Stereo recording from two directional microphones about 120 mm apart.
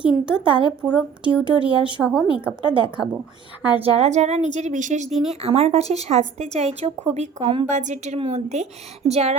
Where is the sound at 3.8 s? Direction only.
60° right (ahead or behind); by 5.1 s 90° right.